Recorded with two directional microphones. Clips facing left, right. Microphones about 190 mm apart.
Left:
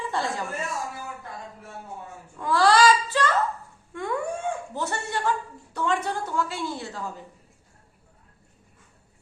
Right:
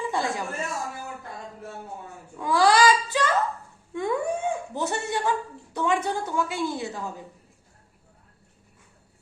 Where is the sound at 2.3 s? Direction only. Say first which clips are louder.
Even; 15° right (ahead or behind).